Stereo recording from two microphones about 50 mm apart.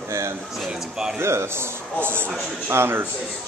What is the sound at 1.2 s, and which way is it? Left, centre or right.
Speech, right.